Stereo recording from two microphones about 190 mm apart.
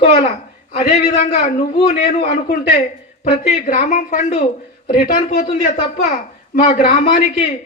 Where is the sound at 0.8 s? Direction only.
40° left (ahead or behind).